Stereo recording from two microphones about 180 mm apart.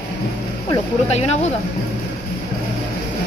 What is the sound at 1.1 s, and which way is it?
Speech, 40° left (ahead or behind).